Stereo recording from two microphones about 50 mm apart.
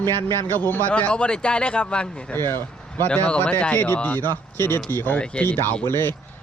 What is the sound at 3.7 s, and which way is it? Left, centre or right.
A man's voice, left.